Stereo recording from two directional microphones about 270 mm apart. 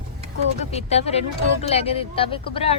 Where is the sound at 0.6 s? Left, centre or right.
Left.